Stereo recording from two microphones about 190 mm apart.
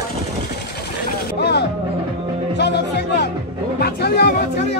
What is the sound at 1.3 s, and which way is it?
Music, 60° left (ahead or behind).